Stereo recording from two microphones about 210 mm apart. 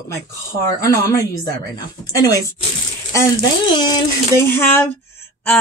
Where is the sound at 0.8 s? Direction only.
15° left (ahead or behind).